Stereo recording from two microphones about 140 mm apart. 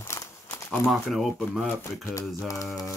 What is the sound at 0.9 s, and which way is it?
Speech, centre (ahead or behind).